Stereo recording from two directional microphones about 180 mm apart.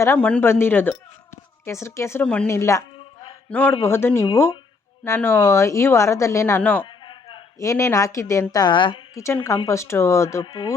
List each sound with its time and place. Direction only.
0.0 s speech: 10° left (ahead or behind)
2.5 s a sound: 15° left (ahead or behind)
3.5 s speech: 10° left (ahead or behind)
6.8 s a woman's voice: 25° left (ahead or behind)
9.2 s speech: 15° left (ahead or behind)